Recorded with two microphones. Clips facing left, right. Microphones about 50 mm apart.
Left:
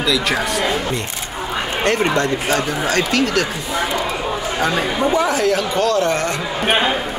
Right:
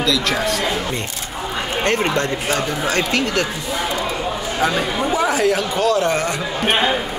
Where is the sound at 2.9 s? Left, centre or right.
Right.